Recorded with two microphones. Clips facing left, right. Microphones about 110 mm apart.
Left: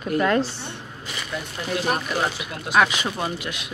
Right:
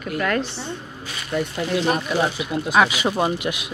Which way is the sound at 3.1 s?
25° right (ahead or behind).